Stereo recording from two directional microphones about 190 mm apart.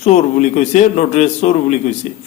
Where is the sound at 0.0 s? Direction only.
35° left (ahead or behind).